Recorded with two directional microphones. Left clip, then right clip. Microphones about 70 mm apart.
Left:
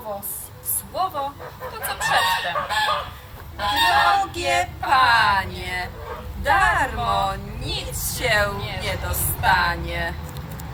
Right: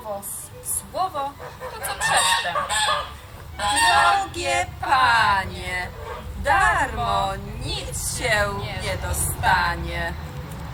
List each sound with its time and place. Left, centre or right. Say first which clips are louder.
0.9 s fowl: left 1 dB; centre
3.6 s goose: even; centre
4.4 s speech: left 2 dB; centre